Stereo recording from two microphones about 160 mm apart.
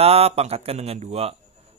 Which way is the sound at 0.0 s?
40° right (ahead or behind).